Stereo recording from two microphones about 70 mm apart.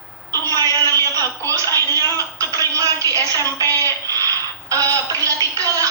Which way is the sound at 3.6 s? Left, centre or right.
Right.